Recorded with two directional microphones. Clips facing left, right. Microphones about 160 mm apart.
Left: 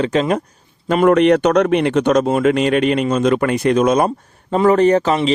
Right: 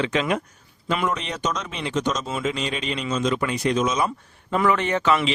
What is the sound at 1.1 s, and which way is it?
Speech, 65° left (ahead or behind).